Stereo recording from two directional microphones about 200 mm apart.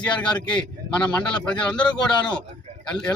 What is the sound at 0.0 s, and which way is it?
A man's voice, 5° left (ahead or behind).